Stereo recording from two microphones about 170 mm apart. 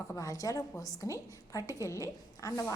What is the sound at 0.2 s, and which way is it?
A woman's voice, 20° left (ahead or behind).